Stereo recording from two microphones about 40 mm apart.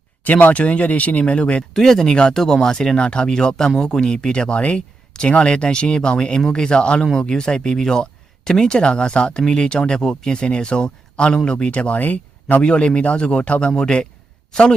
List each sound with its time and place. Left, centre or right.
0.3 s speech: left
1.7 s speech: centre
10.3 s speech: left
11.9 s speech: left
12.6 s speech: left